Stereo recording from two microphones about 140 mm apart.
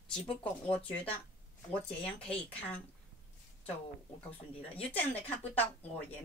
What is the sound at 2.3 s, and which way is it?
Speech, 10° left (ahead or behind).